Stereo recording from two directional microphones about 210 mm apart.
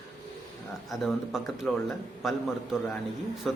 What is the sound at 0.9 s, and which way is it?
A man's voice, centre (ahead or behind).